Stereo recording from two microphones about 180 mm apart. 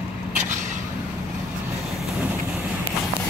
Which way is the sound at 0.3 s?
45° right (ahead or behind).